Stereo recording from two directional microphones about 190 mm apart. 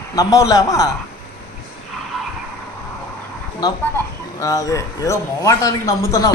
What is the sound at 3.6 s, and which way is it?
A man's voice, 20° left (ahead or behind).